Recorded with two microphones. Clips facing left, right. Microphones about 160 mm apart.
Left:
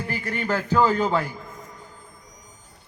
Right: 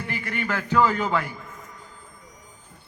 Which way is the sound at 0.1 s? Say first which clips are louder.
Left 2 dB; 35° left (ahead or behind).